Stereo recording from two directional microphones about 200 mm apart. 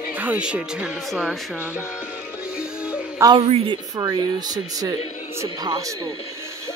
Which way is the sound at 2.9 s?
15° right (ahead or behind).